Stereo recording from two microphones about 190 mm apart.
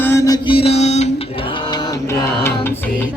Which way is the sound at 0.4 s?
30° left (ahead or behind).